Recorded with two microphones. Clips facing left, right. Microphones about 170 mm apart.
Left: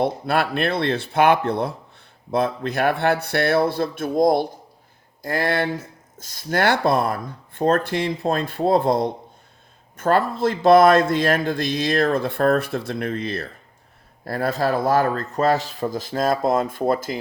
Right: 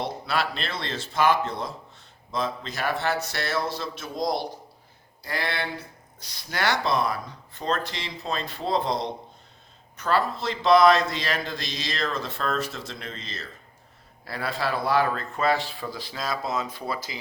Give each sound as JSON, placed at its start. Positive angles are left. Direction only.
{"t": 0.0, "sound": "speech", "side_deg": 55}
{"t": 14.3, "sound": "speech", "side_deg": 45}